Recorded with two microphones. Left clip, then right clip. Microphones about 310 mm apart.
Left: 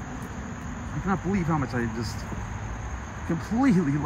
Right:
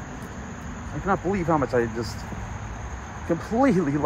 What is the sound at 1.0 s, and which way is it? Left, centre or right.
Speech, centre.